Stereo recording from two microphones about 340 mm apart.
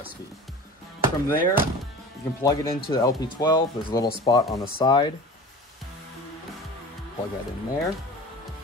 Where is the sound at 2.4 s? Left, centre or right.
Centre.